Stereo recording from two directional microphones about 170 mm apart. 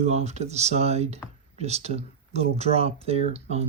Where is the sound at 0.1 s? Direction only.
40° right (ahead or behind).